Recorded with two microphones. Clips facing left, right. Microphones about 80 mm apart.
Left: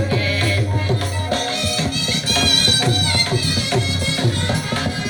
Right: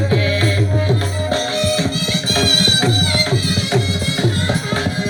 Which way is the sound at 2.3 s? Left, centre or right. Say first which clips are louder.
Right 3 dB; right.